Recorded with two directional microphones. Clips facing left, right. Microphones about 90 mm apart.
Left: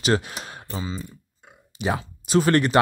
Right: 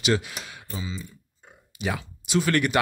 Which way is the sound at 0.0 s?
40° left (ahead or behind).